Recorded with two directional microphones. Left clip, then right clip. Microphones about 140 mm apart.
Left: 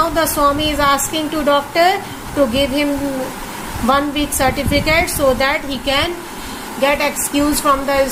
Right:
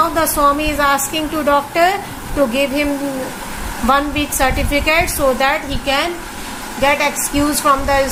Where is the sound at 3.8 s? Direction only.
5° left (ahead or behind).